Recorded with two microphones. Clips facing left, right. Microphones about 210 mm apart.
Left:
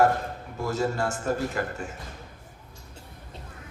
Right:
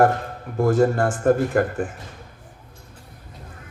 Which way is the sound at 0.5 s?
55° right (ahead or behind).